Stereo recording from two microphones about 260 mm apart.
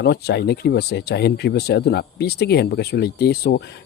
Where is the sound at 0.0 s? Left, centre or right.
Left.